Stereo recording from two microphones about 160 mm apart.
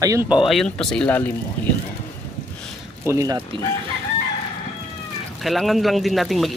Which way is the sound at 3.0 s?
20° right (ahead or behind).